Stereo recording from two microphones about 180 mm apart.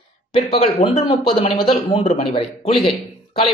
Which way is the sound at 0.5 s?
35° left (ahead or behind).